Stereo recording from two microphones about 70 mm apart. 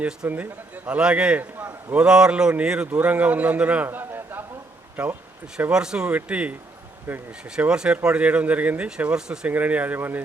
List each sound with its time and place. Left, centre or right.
0.2 s a man's voice: right
3.8 s a sound: right
5.0 s a man's voice: centre
7.7 s speech: centre
9.5 s speech: right